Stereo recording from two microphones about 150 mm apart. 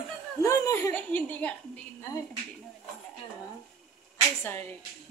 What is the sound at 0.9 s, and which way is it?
Speech, 10° left (ahead or behind).